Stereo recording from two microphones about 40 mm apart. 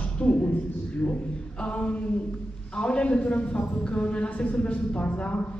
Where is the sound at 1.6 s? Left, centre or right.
Left.